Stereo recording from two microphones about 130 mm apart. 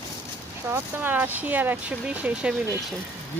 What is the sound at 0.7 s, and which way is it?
Speech, 15° right (ahead or behind).